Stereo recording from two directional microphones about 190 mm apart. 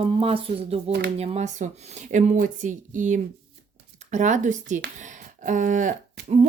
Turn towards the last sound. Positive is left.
turn(degrees=-40)  # may be behind; listen again after turning